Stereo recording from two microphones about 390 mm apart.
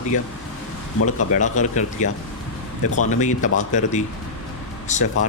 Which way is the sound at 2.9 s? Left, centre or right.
Centre.